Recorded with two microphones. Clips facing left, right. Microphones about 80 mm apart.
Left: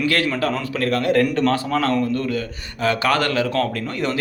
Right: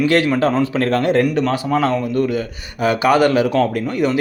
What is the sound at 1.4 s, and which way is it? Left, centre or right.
A man's voice, centre.